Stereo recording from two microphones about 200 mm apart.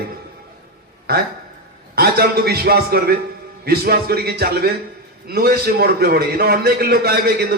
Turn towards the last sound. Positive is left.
turn(degrees=-50)  # may be behind; listen again after turning